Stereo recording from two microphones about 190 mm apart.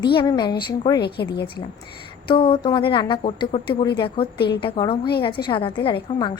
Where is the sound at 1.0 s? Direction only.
60° left (ahead or behind).